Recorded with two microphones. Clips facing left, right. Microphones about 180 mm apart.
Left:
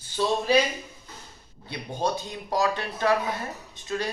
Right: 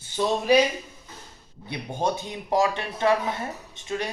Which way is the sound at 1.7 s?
20° right (ahead or behind).